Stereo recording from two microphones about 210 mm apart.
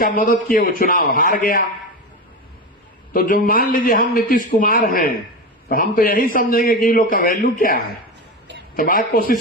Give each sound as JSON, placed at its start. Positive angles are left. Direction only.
{"t": 0.0, "sound": "a man's voice", "side_deg": 40}
{"t": 3.1, "sound": "a man's voice", "side_deg": 40}